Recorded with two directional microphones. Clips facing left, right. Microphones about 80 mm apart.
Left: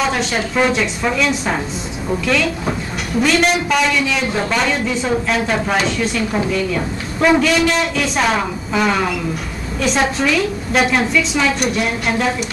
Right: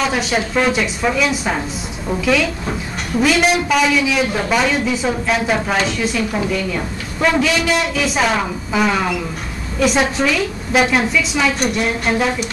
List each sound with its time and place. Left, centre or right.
0.0 s a man's voice: centre
3.2 s a man's voice: centre